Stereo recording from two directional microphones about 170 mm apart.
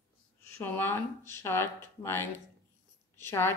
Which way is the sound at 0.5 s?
10° left (ahead or behind).